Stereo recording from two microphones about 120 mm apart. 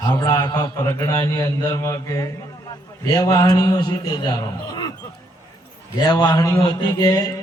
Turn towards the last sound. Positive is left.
turn(degrees=35)  # may be behind; listen again after turning